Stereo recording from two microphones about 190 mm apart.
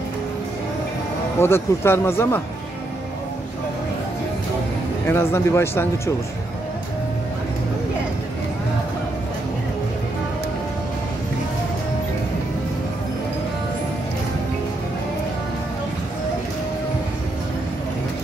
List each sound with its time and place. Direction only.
1.4 s speech: 15° left (ahead or behind)
5.0 s speech: 15° left (ahead or behind)